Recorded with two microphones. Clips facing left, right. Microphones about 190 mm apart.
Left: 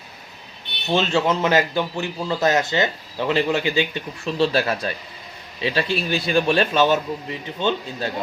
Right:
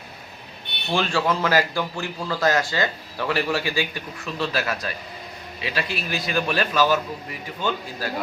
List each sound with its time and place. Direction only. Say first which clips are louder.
0.9 s speech: left 3 dB; 20° left (ahead or behind)